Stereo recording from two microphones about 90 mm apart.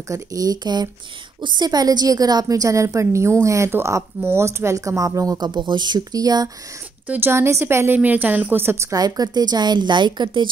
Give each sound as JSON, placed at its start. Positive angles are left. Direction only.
{"t": 0.1, "sound": "a woman's voice", "side_deg": -40}
{"t": 5.5, "sound": "a woman's voice", "side_deg": -60}
{"t": 7.1, "sound": "a woman's voice", "side_deg": -25}
{"t": 8.9, "sound": "a woman's voice", "side_deg": -45}